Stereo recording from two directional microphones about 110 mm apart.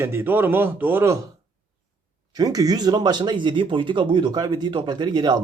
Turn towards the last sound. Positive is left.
turn(degrees=-40)  # may be behind; listen again after turning